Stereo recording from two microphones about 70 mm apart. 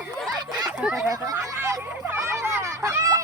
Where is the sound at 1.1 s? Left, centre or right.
Right.